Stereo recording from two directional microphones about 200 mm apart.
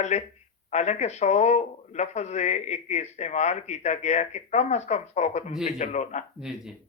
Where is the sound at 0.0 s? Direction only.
35° left (ahead or behind).